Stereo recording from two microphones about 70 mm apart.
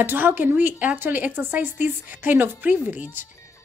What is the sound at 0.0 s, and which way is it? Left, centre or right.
Speech, right.